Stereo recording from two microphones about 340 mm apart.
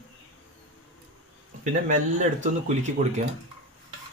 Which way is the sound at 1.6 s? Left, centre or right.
Right.